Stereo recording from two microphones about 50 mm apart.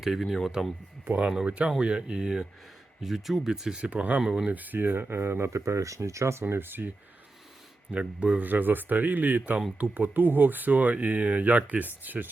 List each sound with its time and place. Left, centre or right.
0.0 s speech: centre
1.5 s speech: right
3.0 s speech: centre
3.8 s speech: right
4.3 s speech: centre
4.5 s speech: right
5.5 s speech: right
6.5 s speech: right
7.9 s speech: right
8.4 s speech: right